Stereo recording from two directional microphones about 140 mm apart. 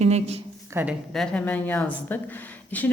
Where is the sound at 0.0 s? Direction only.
50° right (ahead or behind).